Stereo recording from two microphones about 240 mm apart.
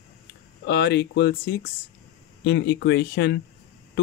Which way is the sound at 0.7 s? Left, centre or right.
Left.